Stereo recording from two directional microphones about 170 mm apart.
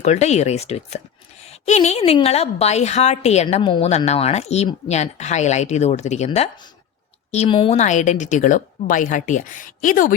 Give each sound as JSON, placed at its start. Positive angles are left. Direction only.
{"t": 0.0, "sound": "a woman's voice", "side_deg": 40}